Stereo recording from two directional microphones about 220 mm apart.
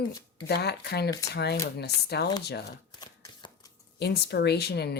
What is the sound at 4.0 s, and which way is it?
Speech, 50° left (ahead or behind).